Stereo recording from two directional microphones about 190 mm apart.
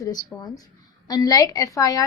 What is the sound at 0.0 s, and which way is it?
A woman's voice, 20° left (ahead or behind).